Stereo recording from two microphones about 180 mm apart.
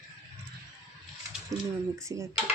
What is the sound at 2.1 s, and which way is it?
Speech, 20° right (ahead or behind).